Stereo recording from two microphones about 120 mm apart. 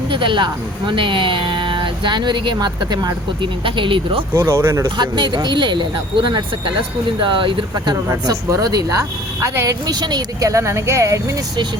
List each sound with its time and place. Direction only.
0.1 s speech: 45° right (ahead or behind)
4.4 s speech: 20° right (ahead or behind)
4.9 s speech: 40° right (ahead or behind)
8.1 s speech: 30° right (ahead or behind)